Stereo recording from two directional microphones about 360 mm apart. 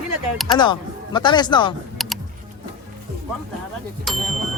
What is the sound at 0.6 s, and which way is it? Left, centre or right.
Speech, centre.